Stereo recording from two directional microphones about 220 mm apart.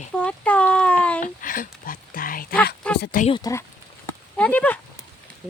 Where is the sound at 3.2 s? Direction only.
20° left (ahead or behind).